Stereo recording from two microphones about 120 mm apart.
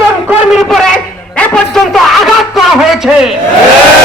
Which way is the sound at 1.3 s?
10° left (ahead or behind).